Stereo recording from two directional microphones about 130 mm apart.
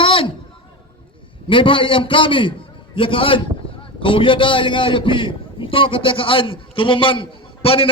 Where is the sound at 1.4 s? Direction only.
40° left (ahead or behind).